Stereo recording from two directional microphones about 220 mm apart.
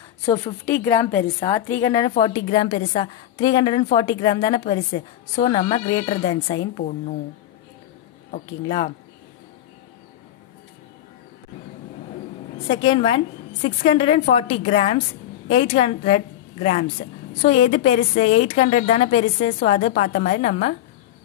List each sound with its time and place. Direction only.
0.2 s a woman's voice: 25° left (ahead or behind)
0.7 s a woman's voice: 10° left (ahead or behind)
6.8 s a woman's voice: 35° left (ahead or behind)
8.6 s a woman's voice: 30° left (ahead or behind)
12.6 s a woman's voice: 20° left (ahead or behind)